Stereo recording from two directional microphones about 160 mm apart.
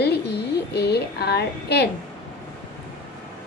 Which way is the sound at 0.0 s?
90° left.